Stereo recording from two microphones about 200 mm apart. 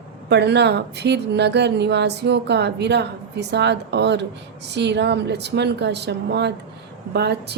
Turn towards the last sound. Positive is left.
turn(degrees=-55)  # may be behind; listen again after turning